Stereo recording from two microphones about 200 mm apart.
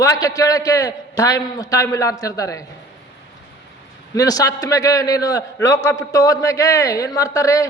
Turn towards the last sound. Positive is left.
turn(degrees=15)  # may be behind; listen again after turning